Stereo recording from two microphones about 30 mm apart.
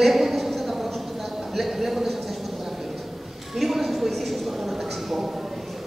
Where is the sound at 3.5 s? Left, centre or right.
Centre.